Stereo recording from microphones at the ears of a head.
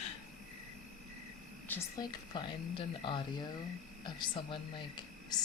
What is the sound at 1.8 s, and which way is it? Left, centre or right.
Speech, left.